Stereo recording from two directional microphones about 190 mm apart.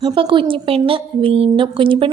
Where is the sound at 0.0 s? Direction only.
25° right (ahead or behind).